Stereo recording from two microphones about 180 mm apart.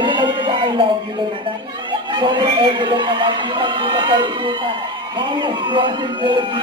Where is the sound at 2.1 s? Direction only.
25° right (ahead or behind).